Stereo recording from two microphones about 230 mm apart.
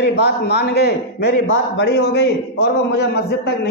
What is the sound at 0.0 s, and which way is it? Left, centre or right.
A man's voice, left.